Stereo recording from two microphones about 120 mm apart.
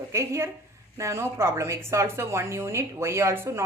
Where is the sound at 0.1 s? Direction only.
20° right (ahead or behind).